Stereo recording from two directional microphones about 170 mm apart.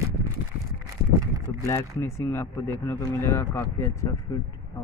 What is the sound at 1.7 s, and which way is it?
Speech, 15° left (ahead or behind).